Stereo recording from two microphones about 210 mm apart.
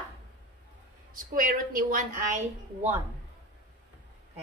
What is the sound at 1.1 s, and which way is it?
A woman's voice, 40° right (ahead or behind).